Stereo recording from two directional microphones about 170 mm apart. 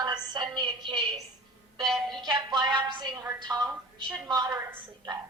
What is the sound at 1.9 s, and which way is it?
Speech, centre (ahead or behind).